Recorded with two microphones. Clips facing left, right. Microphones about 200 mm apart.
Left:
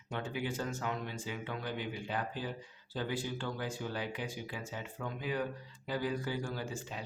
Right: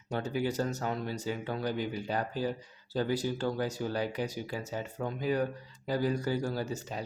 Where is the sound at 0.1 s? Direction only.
40° right (ahead or behind).